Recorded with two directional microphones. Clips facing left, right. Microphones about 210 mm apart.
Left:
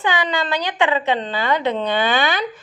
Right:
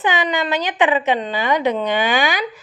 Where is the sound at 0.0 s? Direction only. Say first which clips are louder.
Right 2 dB; 20° right (ahead or behind).